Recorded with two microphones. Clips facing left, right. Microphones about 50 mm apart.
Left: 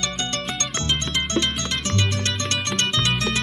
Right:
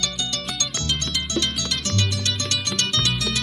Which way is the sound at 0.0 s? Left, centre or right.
Left.